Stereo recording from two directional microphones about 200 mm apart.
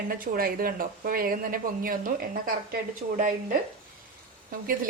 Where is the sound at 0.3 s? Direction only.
45° right (ahead or behind).